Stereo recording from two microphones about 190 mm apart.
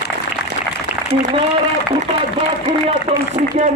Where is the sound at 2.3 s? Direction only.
30° right (ahead or behind).